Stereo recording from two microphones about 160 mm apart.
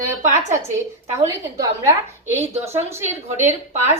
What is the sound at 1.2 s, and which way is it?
A woman's voice, 20° right (ahead or behind).